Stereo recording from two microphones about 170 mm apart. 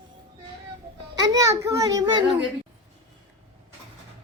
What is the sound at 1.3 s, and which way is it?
A child's voice, 20° right (ahead or behind).